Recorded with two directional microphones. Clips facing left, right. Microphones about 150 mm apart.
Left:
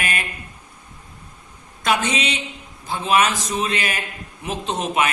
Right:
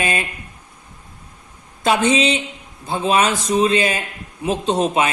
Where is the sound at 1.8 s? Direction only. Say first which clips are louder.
Right 5 dB; 30° right (ahead or behind).